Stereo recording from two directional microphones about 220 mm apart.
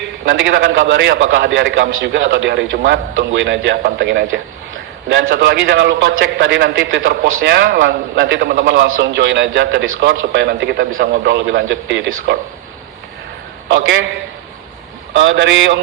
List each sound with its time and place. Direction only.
0.3 s a man's voice: 55° right (ahead or behind)
13.7 s a man's voice: 55° right (ahead or behind)
15.1 s a man's voice: 60° right (ahead or behind)